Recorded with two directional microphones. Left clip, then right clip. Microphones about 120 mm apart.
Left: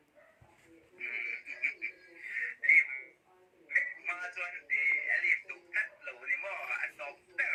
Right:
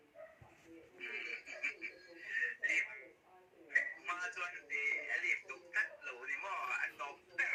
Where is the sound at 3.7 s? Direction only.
20° left (ahead or behind).